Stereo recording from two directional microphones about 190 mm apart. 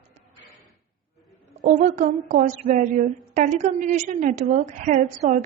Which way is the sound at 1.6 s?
40° right (ahead or behind).